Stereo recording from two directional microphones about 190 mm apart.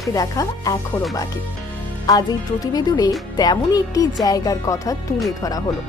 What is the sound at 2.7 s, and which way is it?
Speech, 20° left (ahead or behind).